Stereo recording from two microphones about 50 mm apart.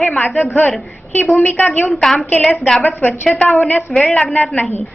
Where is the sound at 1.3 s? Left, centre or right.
Left.